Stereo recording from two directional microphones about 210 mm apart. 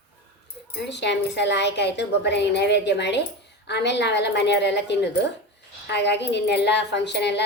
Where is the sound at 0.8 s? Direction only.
55° left (ahead or behind).